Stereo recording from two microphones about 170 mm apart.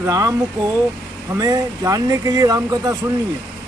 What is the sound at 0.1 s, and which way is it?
Speech, 20° right (ahead or behind).